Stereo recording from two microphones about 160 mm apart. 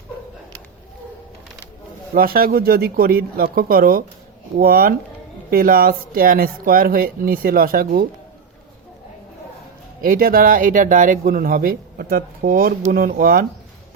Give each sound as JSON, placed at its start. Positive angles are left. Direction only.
{"t": 2.1, "sound": "speech", "side_deg": -65}
{"t": 10.0, "sound": "speech", "side_deg": -65}